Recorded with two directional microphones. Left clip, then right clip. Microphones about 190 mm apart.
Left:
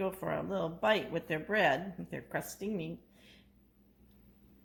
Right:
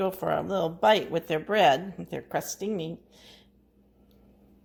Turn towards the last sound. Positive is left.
turn(degrees=-40)  # may be behind; listen again after turning